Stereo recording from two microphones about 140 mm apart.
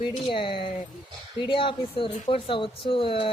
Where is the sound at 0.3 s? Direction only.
40° left (ahead or behind).